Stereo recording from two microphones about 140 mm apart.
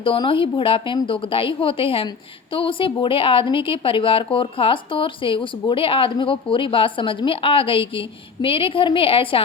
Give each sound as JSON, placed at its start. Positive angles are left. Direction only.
{"t": 0.0, "sound": "a woman's voice", "side_deg": 40}